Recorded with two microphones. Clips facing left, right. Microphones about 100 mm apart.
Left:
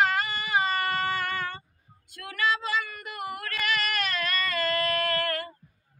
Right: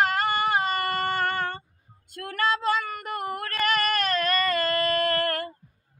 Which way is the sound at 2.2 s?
50° right (ahead or behind).